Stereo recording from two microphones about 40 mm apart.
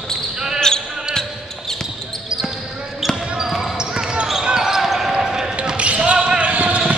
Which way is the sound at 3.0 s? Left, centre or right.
Centre.